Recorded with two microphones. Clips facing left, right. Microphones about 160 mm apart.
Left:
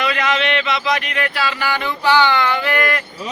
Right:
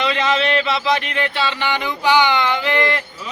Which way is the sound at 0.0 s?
25° right (ahead or behind).